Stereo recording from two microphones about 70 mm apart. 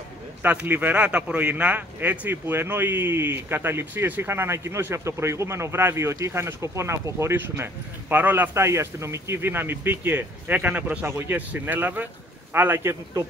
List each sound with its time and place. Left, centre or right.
0.4 s speech: right
8.5 s speech: right; by 11.1 s centre
11.1 s speech: right
11.3 s speech: right